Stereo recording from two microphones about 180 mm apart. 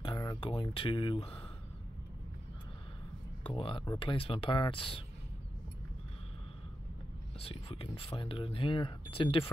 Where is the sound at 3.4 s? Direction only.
30° left (ahead or behind).